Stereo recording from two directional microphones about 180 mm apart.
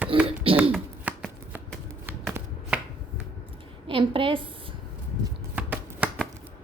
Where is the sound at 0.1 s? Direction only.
30° right (ahead or behind).